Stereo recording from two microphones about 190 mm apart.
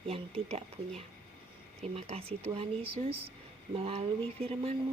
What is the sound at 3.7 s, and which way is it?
Speech, 30° right (ahead or behind).